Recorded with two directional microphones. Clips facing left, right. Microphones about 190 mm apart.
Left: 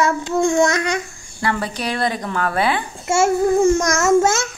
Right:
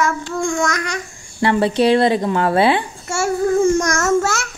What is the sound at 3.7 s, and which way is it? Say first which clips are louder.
Speech: left 1 dB; 10° left (ahead or behind).